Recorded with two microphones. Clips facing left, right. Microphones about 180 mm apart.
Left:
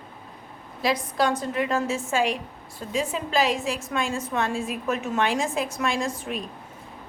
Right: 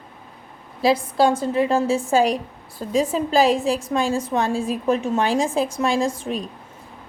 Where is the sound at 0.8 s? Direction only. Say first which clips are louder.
Right 6 dB; 30° right (ahead or behind).